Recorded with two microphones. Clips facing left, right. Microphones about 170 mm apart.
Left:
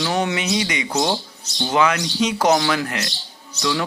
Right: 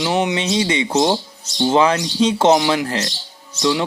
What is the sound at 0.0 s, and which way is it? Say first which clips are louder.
Speech: right 3 dB; 20° right (ahead or behind).